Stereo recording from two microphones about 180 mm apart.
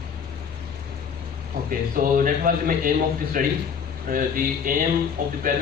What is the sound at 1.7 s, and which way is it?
A man's voice, 50° right (ahead or behind).